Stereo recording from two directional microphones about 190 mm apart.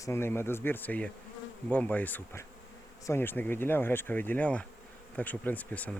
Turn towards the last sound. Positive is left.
turn(degrees=5)  # may be behind; listen again after turning